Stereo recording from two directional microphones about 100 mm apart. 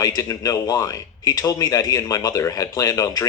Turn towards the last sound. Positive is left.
turn(degrees=35)  # may be behind; listen again after turning